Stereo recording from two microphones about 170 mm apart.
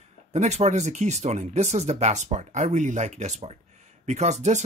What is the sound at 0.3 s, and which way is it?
Speech, 40° right (ahead or behind).